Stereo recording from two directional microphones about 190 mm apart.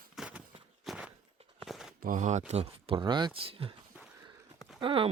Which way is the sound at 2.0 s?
45° right (ahead or behind).